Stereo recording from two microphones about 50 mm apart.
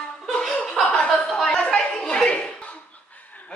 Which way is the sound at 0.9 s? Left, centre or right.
Centre.